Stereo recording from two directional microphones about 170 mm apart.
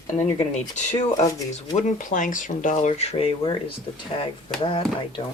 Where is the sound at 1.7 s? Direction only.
50° left (ahead or behind); by 3.6 s 30° left (ahead or behind).